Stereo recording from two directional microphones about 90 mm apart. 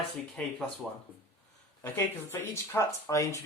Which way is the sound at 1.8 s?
25° left (ahead or behind).